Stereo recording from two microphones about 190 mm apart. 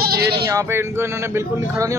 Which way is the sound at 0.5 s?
15° right (ahead or behind).